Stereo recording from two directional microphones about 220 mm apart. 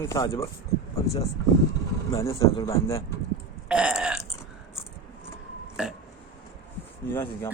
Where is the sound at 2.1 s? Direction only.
15° left (ahead or behind).